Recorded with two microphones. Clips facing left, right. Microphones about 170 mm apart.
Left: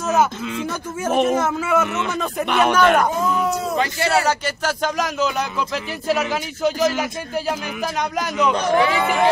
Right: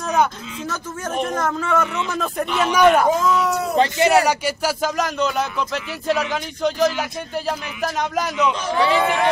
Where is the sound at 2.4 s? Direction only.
65° left (ahead or behind).